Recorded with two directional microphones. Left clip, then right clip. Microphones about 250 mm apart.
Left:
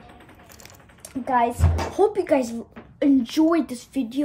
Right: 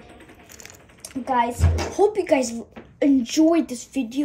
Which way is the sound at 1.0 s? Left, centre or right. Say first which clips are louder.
Left 1 dB; centre.